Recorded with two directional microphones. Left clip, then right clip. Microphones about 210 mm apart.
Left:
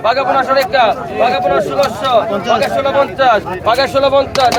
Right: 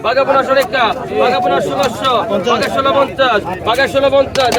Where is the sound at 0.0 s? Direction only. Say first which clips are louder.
Even; 20° left (ahead or behind).